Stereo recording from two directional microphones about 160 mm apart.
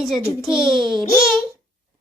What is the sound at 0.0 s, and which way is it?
A woman's voice, centre (ahead or behind).